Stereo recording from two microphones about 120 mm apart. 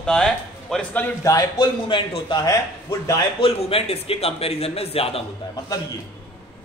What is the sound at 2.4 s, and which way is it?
Speech, 25° left (ahead or behind).